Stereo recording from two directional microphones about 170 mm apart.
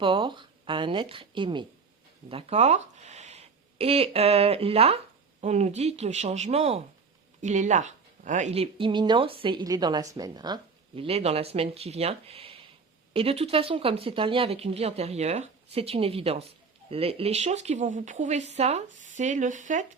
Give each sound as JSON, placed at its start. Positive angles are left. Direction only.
{"t": 0.0, "sound": "speech", "side_deg": -30}
{"t": 2.3, "sound": "speech", "side_deg": -40}